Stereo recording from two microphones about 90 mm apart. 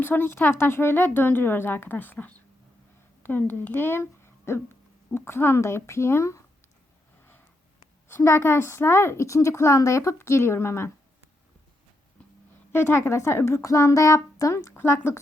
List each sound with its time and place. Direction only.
0.0 s speech: 25° left (ahead or behind)
8.0 s a woman's voice: 30° left (ahead or behind)
12.7 s a woman's voice: 25° left (ahead or behind)
14.7 s speech: 25° left (ahead or behind)